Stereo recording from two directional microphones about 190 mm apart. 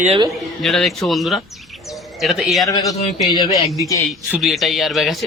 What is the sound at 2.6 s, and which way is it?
Speech, 15° left (ahead or behind).